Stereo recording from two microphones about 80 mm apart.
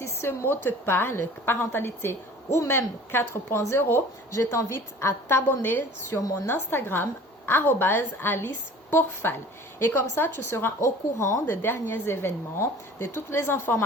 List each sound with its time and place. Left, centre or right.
0.0 s a woman's voice: left
4.3 s a woman's voice: left
6.1 s a woman's voice: left
6.7 s a woman's voice: left
10.8 s a woman's voice: left